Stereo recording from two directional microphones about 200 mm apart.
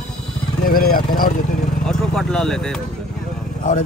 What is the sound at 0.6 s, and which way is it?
Speech, 45° left (ahead or behind).